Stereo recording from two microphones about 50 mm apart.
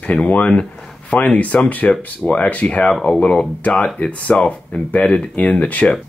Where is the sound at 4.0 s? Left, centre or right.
Left.